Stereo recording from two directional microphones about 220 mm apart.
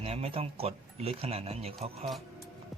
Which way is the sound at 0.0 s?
25° right (ahead or behind).